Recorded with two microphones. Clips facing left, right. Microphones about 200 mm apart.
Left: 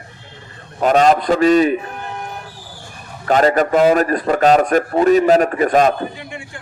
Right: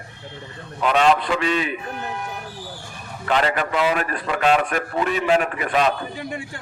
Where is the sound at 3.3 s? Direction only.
40° left (ahead or behind).